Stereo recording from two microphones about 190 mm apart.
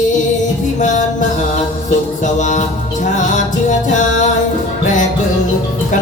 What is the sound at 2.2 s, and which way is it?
Music, 40° left (ahead or behind).